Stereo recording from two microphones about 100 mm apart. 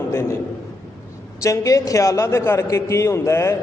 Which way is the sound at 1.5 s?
35° left (ahead or behind).